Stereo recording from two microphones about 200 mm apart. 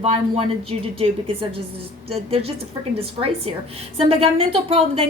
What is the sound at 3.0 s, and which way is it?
A woman's voice, 30° right (ahead or behind).